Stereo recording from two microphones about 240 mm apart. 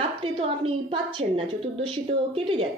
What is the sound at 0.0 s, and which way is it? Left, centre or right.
A woman's voice, right.